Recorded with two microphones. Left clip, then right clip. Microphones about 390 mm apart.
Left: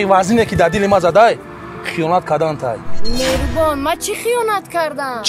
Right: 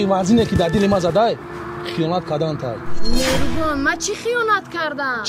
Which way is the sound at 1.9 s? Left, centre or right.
Centre.